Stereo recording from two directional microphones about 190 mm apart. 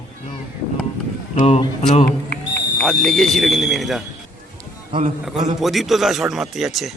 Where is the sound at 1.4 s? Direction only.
40° left (ahead or behind).